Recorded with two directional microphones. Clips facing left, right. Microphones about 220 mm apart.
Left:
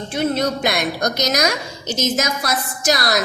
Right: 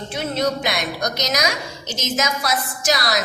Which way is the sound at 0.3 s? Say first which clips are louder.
Left 2 dB; 50° left (ahead or behind).